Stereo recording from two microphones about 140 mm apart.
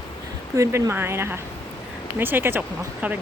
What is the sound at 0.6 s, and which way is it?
Speech, 20° right (ahead or behind).